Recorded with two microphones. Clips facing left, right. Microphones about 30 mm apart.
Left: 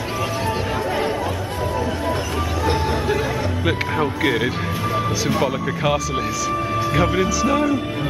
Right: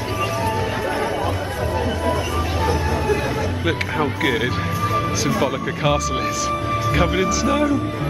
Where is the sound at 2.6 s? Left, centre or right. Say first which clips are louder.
Left 2 dB; left.